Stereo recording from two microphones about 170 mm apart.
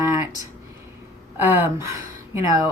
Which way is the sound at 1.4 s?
10° right (ahead or behind).